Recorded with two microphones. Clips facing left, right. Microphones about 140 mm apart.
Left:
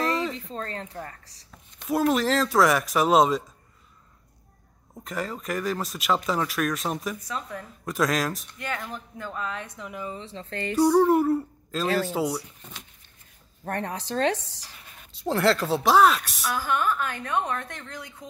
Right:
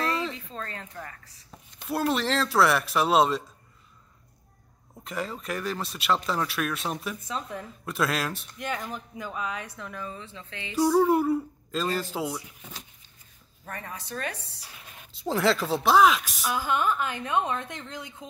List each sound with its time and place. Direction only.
0.3 s speech: 30° left (ahead or behind)
1.8 s speech: centre (ahead or behind)
5.0 s speech: centre (ahead or behind)
6.4 s speech: 5° right (ahead or behind)
8.6 s speech: 15° right (ahead or behind)
9.8 s speech: 15° left (ahead or behind)
10.1 s speech: 35° left (ahead or behind)
10.8 s speech: 5° right (ahead or behind)
13.7 s speech: 70° left (ahead or behind); by 14.6 s 90° left
15.2 s speech: centre (ahead or behind)
16.4 s a woman's voice: 20° right (ahead or behind)